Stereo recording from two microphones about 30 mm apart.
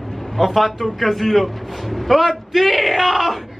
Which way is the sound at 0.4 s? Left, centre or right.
Centre.